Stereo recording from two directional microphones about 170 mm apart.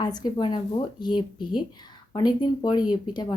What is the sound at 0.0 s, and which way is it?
Speech, 25° left (ahead or behind).